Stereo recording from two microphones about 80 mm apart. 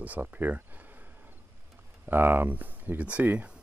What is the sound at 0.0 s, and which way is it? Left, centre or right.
Cricket, right.